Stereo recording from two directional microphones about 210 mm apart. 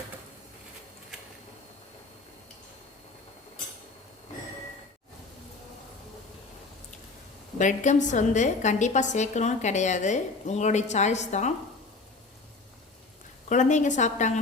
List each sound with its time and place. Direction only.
7.6 s a woman's voice: 35° left (ahead or behind)
13.5 s a woman's voice: 35° left (ahead or behind)